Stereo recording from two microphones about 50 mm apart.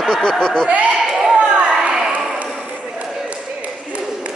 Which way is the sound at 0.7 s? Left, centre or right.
Right.